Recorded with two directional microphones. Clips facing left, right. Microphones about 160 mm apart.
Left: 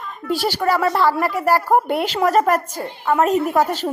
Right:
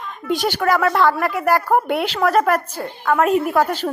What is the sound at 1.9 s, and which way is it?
Speech, 40° left (ahead or behind).